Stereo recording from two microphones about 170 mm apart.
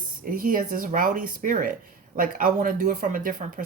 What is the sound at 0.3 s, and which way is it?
Speech, 55° right (ahead or behind).